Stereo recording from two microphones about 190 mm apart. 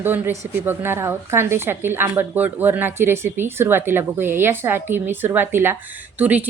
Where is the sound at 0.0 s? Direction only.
10° right (ahead or behind).